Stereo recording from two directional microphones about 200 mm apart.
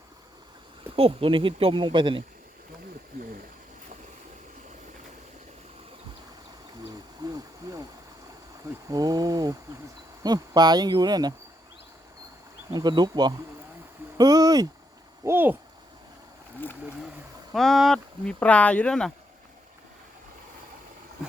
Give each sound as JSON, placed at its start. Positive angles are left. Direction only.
{"t": 0.9, "sound": "speech", "side_deg": -30}
{"t": 8.9, "sound": "speech", "side_deg": -20}
{"t": 12.7, "sound": "speech", "side_deg": -20}
{"t": 15.2, "sound": "owl", "side_deg": -10}
{"t": 16.6, "sound": "speech", "side_deg": 10}